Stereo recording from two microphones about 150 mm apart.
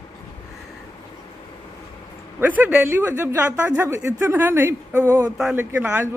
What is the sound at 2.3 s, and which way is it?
A woman's voice, 10° right (ahead or behind).